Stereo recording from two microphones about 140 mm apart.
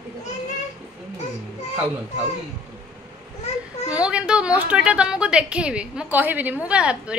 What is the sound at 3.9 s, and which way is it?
A woman's voice, 5° right (ahead or behind).